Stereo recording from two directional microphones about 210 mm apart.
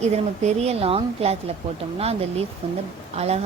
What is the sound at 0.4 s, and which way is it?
Speech, 30° right (ahead or behind).